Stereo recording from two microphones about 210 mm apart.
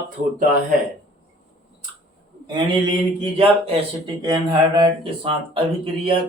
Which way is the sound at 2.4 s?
20° right (ahead or behind).